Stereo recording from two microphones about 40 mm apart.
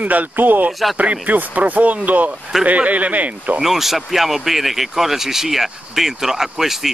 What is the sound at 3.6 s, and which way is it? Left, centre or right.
Speech, centre.